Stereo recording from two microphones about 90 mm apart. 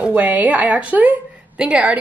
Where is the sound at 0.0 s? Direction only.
15° right (ahead or behind).